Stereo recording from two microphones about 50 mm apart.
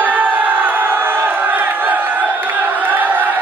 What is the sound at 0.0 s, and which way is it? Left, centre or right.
Crowd, right.